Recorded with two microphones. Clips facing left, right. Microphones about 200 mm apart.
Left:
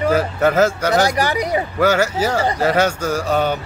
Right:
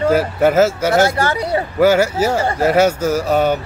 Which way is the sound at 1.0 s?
15° left (ahead or behind).